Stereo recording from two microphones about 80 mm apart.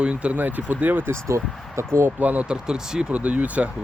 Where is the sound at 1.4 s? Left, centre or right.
Centre.